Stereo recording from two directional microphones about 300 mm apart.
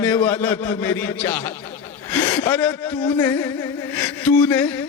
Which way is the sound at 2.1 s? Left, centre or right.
Centre.